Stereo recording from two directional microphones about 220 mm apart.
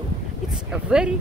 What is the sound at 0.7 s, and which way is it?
Speech, 5° right (ahead or behind).